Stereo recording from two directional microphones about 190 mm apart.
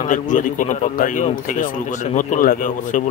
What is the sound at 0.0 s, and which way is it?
A man's voice, 40° left (ahead or behind).